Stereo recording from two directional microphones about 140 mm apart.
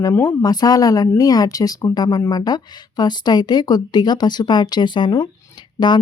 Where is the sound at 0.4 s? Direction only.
25° left (ahead or behind).